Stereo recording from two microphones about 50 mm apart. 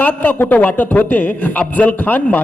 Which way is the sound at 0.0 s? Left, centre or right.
Left.